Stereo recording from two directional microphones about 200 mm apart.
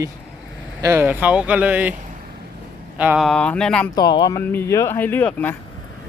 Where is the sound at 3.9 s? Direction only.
20° left (ahead or behind).